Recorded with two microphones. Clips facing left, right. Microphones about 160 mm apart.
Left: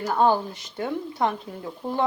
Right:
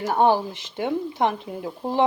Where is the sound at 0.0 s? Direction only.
25° right (ahead or behind).